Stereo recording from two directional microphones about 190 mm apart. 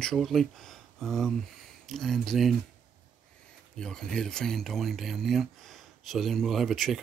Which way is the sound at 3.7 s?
5° left (ahead or behind).